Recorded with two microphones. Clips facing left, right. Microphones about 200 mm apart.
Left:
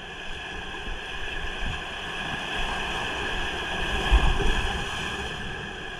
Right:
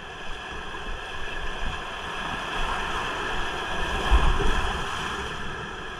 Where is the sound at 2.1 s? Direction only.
20° left (ahead or behind).